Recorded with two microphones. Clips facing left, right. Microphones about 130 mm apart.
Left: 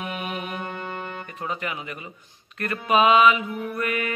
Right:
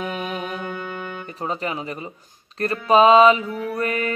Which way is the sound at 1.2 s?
35° right (ahead or behind).